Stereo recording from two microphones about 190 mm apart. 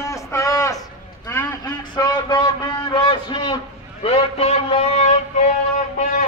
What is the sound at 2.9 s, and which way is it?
Speech, 25° left (ahead or behind).